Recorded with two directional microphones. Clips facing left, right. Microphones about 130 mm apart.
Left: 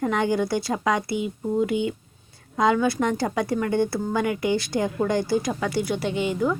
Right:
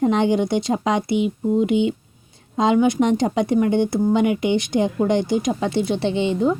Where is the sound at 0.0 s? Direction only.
25° right (ahead or behind).